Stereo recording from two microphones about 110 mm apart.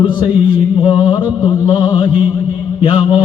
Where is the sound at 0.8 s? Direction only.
40° left (ahead or behind).